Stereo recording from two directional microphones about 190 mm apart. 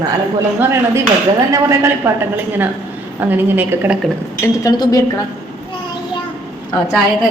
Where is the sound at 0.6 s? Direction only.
15° right (ahead or behind).